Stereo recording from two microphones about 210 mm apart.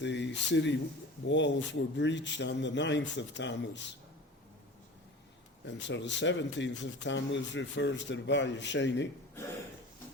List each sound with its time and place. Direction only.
0.0 s speech: 55° left (ahead or behind)
5.6 s speech: 60° left (ahead or behind)